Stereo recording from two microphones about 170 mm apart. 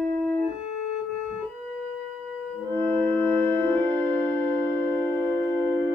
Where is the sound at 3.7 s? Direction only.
30° right (ahead or behind).